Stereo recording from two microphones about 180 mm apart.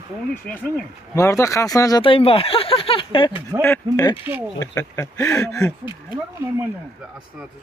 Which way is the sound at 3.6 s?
15° left (ahead or behind).